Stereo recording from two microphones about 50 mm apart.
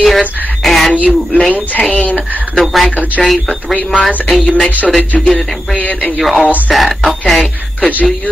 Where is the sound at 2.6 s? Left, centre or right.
Centre.